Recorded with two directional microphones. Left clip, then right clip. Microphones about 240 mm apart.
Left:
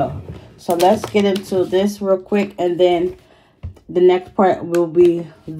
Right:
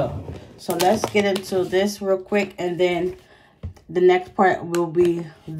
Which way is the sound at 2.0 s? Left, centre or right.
Centre.